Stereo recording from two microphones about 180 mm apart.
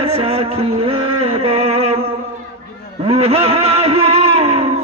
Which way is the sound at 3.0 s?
35° right (ahead or behind).